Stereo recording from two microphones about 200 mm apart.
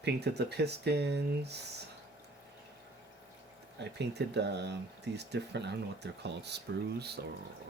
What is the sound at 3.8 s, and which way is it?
Speech, 60° right (ahead or behind).